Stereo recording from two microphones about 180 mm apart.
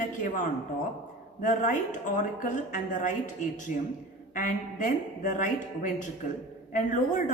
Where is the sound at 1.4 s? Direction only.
45° left (ahead or behind).